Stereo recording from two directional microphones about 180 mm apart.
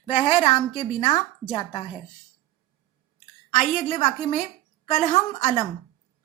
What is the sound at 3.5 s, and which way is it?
Speech, 45° left (ahead or behind).